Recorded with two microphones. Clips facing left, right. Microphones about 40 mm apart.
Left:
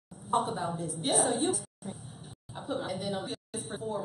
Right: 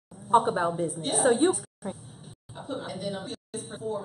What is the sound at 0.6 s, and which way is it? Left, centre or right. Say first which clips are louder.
A woman's voice: right 4 dB; right.